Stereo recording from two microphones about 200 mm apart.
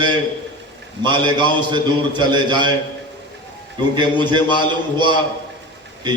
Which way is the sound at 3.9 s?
20° right (ahead or behind).